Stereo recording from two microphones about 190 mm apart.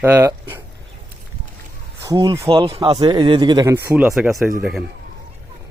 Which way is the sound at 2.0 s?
20° right (ahead or behind).